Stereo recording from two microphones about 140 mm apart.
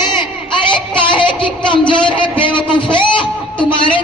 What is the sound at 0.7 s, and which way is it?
A woman's voice, 35° left (ahead or behind).